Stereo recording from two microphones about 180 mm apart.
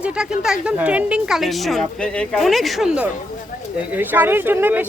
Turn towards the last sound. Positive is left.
turn(degrees=-10)  # may be behind; listen again after turning